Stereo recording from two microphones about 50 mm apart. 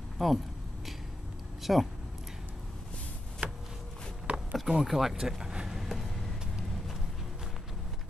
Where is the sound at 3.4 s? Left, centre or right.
Right.